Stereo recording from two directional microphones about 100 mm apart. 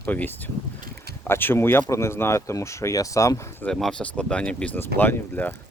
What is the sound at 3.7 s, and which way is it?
Speech, 5° left (ahead or behind).